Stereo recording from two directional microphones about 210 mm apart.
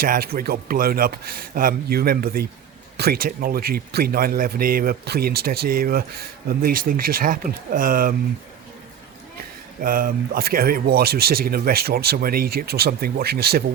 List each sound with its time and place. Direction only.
0.0 s speech: 45° right (ahead or behind)
9.8 s speech: 40° right (ahead or behind)